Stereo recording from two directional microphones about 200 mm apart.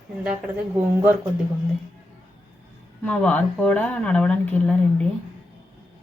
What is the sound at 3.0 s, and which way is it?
Speech, 5° left (ahead or behind).